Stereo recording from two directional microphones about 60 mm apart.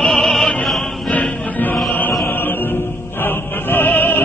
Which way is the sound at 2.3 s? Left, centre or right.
Left.